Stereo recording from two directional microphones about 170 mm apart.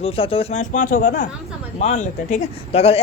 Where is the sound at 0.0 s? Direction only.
35° left (ahead or behind); by 1.3 s 55° left (ahead or behind).